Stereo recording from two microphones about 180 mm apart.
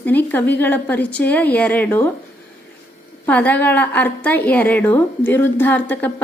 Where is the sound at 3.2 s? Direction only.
10° left (ahead or behind).